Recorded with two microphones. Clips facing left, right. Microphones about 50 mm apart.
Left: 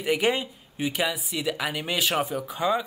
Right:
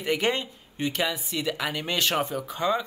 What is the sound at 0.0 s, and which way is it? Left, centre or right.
Speech, centre.